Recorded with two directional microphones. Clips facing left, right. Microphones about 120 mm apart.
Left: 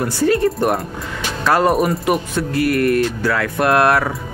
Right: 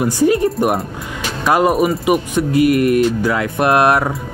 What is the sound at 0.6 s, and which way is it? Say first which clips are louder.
Speech: right 1 dB; 5° right (ahead or behind).